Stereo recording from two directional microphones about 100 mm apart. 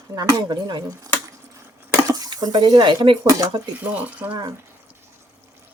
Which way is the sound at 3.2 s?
35° right (ahead or behind).